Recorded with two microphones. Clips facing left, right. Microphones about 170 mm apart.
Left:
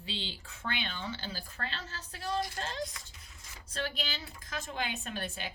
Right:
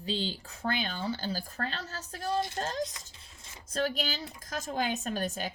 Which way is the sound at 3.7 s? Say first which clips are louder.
Right 6 dB; 40° right (ahead or behind).